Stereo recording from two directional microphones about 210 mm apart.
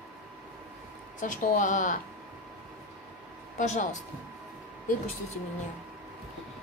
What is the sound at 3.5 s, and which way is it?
Speech, 35° left (ahead or behind).